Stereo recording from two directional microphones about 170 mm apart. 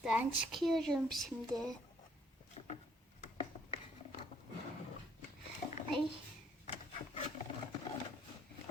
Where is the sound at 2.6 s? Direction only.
35° left (ahead or behind).